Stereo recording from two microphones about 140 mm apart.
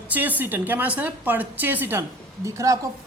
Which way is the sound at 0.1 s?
10° right (ahead or behind).